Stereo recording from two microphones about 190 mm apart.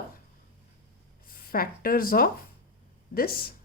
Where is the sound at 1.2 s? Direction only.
50° left (ahead or behind).